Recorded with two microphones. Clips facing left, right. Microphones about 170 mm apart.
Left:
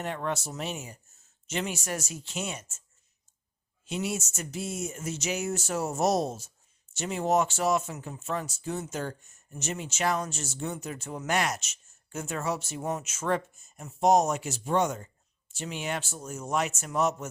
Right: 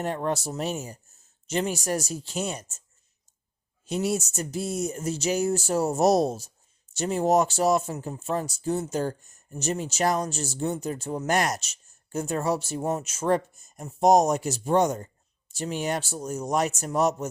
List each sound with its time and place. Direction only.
0.0 s speech: 40° right (ahead or behind)
3.8 s speech: 40° right (ahead or behind)